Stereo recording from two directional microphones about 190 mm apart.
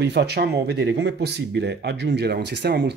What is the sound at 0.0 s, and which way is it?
Speech, 60° right (ahead or behind).